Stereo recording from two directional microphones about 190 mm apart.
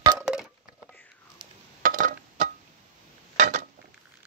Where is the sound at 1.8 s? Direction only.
45° right (ahead or behind).